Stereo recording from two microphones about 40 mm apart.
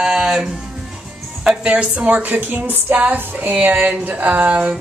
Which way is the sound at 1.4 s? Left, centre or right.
Right.